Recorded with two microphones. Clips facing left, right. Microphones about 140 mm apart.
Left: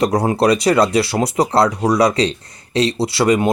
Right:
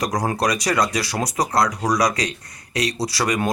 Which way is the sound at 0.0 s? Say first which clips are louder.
Left 7 dB; 30° left (ahead or behind).